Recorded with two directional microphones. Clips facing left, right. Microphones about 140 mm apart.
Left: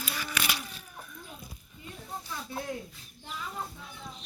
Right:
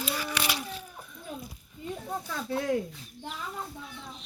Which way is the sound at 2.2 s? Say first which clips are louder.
Right 7 dB; 85° right.